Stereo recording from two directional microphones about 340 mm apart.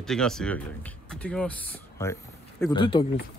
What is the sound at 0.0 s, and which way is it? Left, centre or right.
Speech, centre.